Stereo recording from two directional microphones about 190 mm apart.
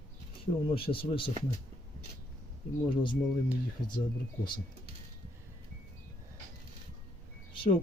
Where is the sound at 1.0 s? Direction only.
25° left (ahead or behind).